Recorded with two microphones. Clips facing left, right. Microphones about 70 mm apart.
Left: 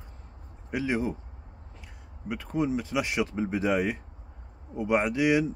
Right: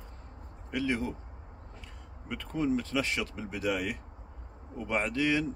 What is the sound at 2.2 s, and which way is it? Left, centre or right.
Speech, centre.